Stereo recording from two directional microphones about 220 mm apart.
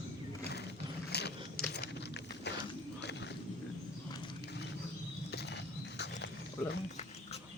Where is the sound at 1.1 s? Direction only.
50° left (ahead or behind).